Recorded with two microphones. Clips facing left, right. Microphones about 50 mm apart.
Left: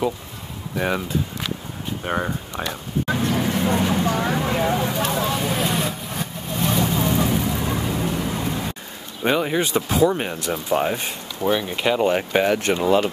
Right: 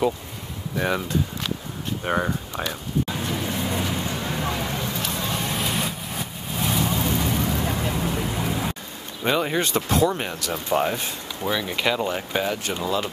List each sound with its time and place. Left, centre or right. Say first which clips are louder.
0.7 s speech: left 1 dB; centre
3.1 s a sound: left 6 dB; left
3.7 s vehicle: left 6 dB; left
4.0 s a sound: left 7 dB; left
4.4 s vehicle: left 6 dB; left
5.3 s vehicle: left 4 dB; centre
8.4 s rain: even; centre
9.4 s speech: left 2 dB; centre
11.4 s speech: left 3 dB; centre
12.0 s speech: left 6 dB; left
12.4 s speech: left 7 dB; left
12.7 s speech: left 8 dB; left